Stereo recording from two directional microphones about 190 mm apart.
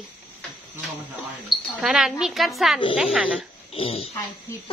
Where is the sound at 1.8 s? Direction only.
5° right (ahead or behind).